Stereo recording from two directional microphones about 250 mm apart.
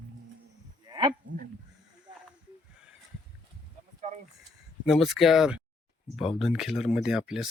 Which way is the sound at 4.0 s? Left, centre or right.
Right.